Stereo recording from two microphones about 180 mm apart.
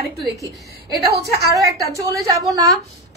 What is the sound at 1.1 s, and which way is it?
Speech, 65° right (ahead or behind).